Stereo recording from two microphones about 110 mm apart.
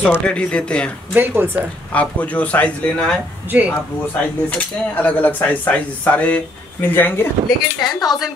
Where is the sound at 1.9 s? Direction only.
15° left (ahead or behind).